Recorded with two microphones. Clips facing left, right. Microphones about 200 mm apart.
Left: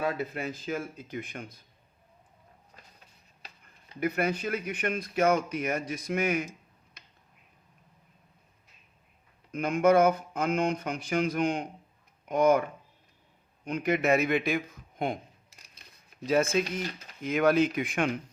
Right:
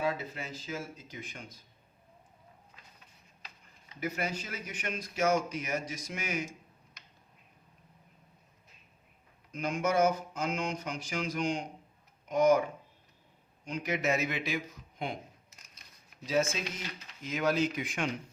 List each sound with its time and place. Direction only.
0.0 s speech: 60° left (ahead or behind)
2.7 s a sound: 40° left (ahead or behind)
4.0 s speech: 60° left (ahead or behind)
9.5 s speech: 60° left (ahead or behind)
13.7 s speech: 55° left (ahead or behind)
16.2 s speech: 55° left (ahead or behind)